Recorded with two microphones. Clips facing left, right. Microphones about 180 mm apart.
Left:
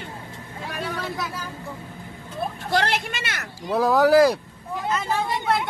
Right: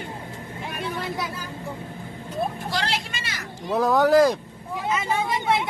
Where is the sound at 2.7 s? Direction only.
55° left (ahead or behind).